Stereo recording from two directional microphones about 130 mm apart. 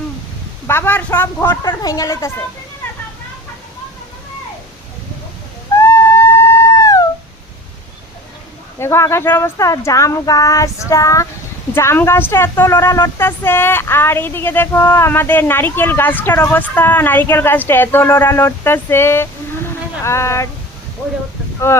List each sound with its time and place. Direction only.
0.7 s speech: 15° left (ahead or behind)
1.6 s speech: 30° left (ahead or behind)
5.7 s a sound: 20° left (ahead or behind)
8.8 s speech: 20° left (ahead or behind)
21.7 s speech: 20° left (ahead or behind)